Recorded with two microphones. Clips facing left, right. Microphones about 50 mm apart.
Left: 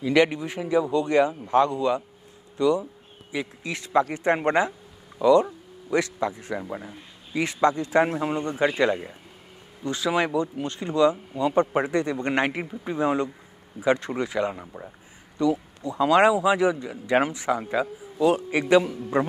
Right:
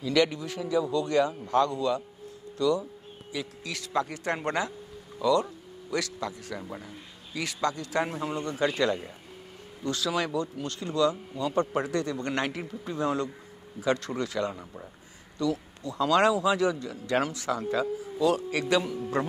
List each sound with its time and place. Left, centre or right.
0.0 s a man's voice: left